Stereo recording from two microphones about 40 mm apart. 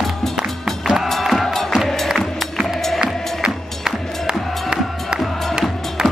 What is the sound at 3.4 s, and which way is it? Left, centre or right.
Music, right.